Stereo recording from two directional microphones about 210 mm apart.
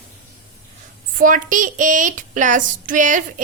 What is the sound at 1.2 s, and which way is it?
A woman's voice, 40° right (ahead or behind).